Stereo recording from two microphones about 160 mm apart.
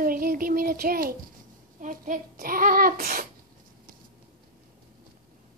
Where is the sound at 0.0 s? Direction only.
60° right (ahead or behind).